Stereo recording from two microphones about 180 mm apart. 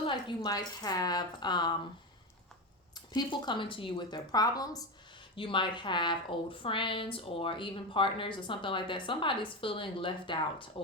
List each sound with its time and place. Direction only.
0.1 s a woman's voice: 25° left (ahead or behind)
2.9 s a woman's voice: 25° left (ahead or behind)